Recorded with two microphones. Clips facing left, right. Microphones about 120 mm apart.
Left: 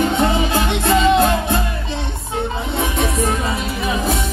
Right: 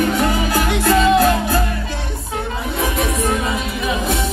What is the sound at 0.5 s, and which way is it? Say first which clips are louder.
Music: right 1 dB; 25° left (ahead or behind).